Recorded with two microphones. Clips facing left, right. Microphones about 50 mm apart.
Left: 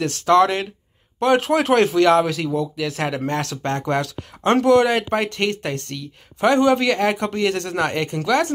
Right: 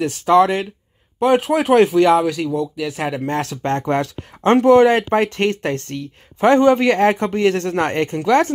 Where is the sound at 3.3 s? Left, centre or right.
Right.